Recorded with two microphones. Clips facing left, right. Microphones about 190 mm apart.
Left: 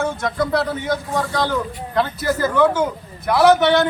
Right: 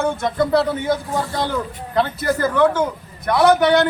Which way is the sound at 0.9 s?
25° right (ahead or behind).